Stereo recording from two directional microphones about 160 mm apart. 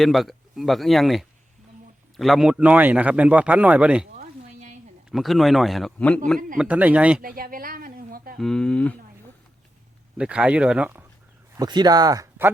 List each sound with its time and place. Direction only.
0.0 s a man's voice: centre (ahead or behind)
5.1 s speech: centre (ahead or behind)
6.6 s a man's voice: 10° right (ahead or behind)
7.2 s a sound: 65° right (ahead or behind)
8.4 s speech: 5° left (ahead or behind)
10.2 s a man's voice: 5° right (ahead or behind)
11.5 s speech: 25° right (ahead or behind)